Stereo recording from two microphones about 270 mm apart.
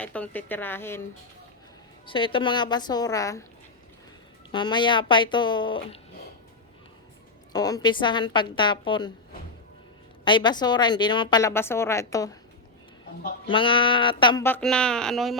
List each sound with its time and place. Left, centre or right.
0.0 s a woman's voice: centre
2.0 s a woman's voice: centre
4.5 s a woman's voice: centre
7.5 s a woman's voice: centre
10.2 s a woman's voice: centre
13.5 s a woman's voice: centre